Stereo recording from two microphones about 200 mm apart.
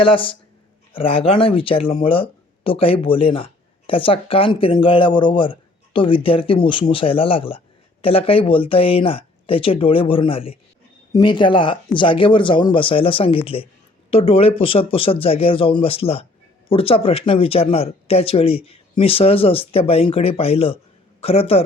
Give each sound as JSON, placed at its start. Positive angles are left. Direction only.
{"t": 0.0, "sound": "speech", "side_deg": 25}